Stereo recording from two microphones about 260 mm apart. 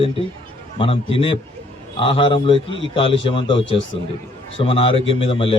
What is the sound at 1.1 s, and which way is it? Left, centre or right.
A man's voice, left.